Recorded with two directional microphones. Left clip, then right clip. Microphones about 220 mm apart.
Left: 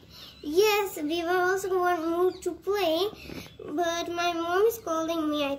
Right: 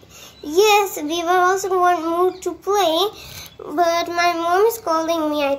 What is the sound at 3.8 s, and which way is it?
Child singing, 15° right (ahead or behind).